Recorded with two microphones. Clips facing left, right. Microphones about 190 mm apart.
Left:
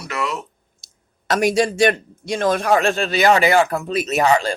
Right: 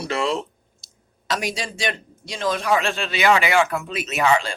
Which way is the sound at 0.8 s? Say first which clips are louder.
Right 3 dB; 50° left (ahead or behind).